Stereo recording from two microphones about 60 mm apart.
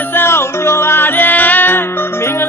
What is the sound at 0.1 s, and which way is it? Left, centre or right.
Music, left.